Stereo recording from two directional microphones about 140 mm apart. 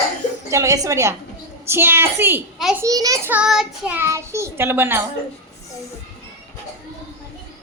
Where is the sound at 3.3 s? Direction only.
5° right (ahead or behind).